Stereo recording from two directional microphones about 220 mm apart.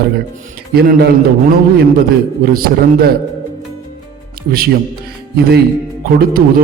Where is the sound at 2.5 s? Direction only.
45° right (ahead or behind).